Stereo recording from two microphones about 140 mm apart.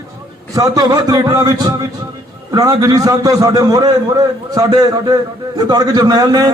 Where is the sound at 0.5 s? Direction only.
25° right (ahead or behind).